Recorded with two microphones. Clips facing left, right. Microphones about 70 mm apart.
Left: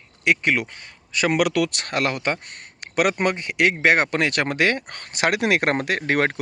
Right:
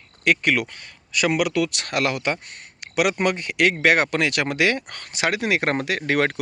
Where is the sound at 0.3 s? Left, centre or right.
Left.